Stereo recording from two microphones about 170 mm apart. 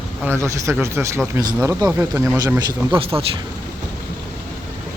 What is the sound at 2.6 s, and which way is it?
Speech, 30° right (ahead or behind).